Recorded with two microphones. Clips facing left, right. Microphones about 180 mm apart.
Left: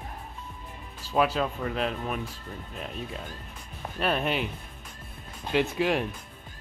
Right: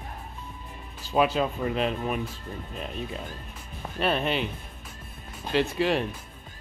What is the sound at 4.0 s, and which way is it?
Speech, 5° left (ahead or behind).